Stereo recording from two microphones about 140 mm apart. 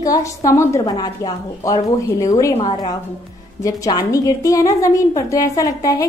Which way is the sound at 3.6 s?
25° left (ahead or behind).